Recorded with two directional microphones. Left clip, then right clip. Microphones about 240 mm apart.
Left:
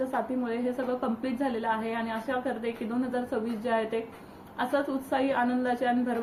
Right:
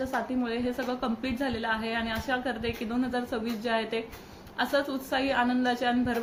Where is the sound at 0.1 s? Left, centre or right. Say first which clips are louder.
Even; centre.